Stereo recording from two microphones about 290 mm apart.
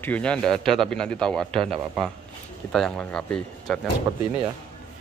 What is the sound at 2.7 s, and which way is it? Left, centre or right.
A man's voice, centre.